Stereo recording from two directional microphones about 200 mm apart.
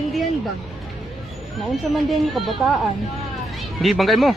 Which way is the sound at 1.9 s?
Centre (ahead or behind).